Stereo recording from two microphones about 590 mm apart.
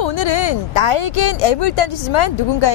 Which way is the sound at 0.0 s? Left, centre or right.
Left.